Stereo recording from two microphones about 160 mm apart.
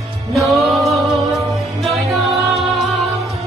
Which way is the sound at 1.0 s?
Centre (ahead or behind).